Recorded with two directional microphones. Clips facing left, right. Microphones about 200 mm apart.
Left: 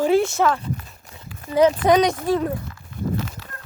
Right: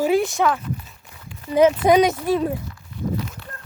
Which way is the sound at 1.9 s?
5° right (ahead or behind).